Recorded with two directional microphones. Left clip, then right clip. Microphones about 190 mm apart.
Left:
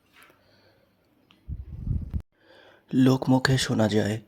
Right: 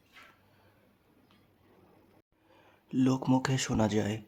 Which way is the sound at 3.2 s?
20° left (ahead or behind).